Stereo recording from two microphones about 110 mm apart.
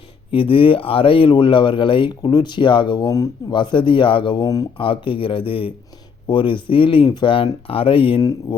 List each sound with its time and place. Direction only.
0.3 s speech: 50° left (ahead or behind)
4.8 s speech: 50° left (ahead or behind)
8.2 s speech: 35° left (ahead or behind)